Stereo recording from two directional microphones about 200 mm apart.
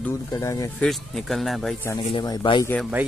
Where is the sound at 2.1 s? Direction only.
25° left (ahead or behind).